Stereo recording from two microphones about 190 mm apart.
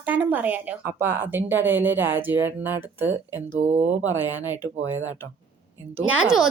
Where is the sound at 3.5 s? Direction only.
35° right (ahead or behind).